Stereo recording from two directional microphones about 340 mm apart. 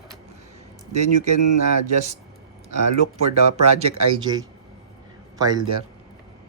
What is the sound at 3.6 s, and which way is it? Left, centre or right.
Speech, centre.